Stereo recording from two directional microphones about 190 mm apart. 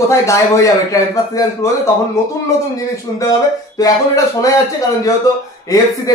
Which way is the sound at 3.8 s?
20° left (ahead or behind).